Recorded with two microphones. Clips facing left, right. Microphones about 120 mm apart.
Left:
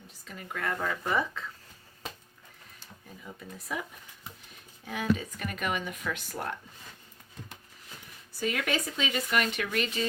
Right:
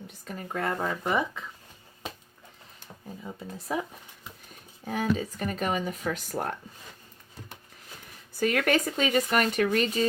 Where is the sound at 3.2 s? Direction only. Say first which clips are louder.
Right 4 dB; 30° right (ahead or behind).